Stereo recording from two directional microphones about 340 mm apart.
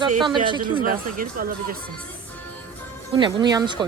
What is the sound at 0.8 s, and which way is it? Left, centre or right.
Speech, right.